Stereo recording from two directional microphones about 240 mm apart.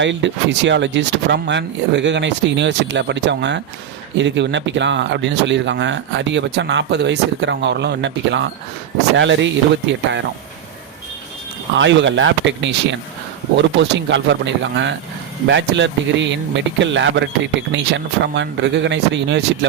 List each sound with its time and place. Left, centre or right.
0.0 s speech: right
11.8 s speech: right